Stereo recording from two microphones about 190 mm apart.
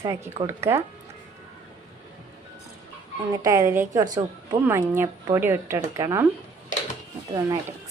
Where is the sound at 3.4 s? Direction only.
15° right (ahead or behind).